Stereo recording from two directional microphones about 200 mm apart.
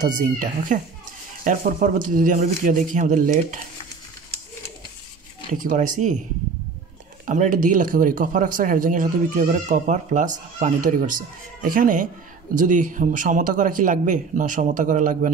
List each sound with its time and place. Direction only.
0.0 s a man's voice: 40° right (ahead or behind)
5.7 s a man's voice: 40° right (ahead or behind)
7.2 s a man's voice: 40° right (ahead or behind)